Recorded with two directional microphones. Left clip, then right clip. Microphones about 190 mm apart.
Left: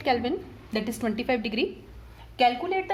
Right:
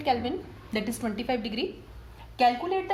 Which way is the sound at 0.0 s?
40° left (ahead or behind).